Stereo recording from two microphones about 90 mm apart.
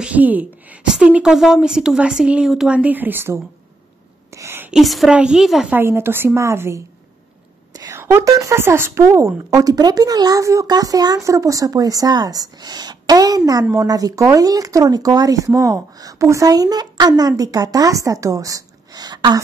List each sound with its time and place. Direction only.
0.0 s a woman's voice: 15° right (ahead or behind)
2.7 s a woman's voice: 15° right (ahead or behind)
4.4 s a sound: 30° right (ahead or behind)
4.6 s a woman's voice: 5° right (ahead or behind)
5.7 s a woman's voice: 25° right (ahead or behind)
7.9 s whispering: 30° right (ahead or behind)
8.3 s speech: 40° right (ahead or behind)
8.5 s speech: 25° right (ahead or behind); by 19.4 s 50° right (ahead or behind)